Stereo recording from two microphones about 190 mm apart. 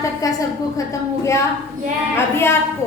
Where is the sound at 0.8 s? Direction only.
15° left (ahead or behind).